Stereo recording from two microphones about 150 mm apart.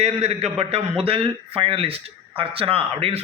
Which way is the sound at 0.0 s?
45° right (ahead or behind).